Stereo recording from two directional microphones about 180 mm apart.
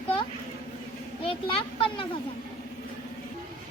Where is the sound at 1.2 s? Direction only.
30° left (ahead or behind).